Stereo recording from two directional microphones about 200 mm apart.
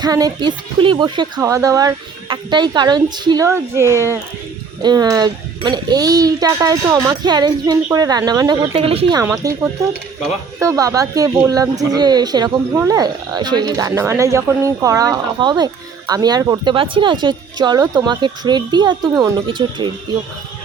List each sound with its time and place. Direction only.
0.0 s speech: 20° right (ahead or behind)